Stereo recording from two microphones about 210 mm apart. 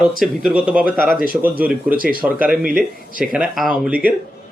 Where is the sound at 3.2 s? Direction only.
5° right (ahead or behind).